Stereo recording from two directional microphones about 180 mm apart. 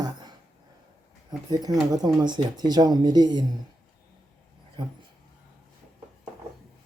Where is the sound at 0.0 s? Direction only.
25° right (ahead or behind).